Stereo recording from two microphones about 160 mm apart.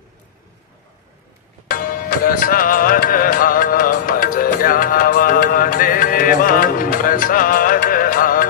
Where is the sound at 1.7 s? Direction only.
60° left (ahead or behind).